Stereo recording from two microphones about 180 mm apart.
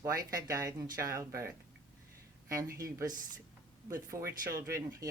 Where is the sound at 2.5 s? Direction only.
15° right (ahead or behind).